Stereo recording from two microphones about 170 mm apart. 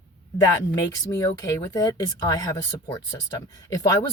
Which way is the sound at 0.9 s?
20° left (ahead or behind).